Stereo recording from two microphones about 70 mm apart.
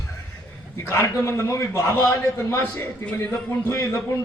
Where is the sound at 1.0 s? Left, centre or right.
Left.